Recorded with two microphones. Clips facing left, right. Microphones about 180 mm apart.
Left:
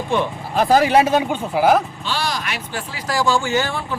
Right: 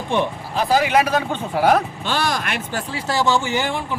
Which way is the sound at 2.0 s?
50° right (ahead or behind).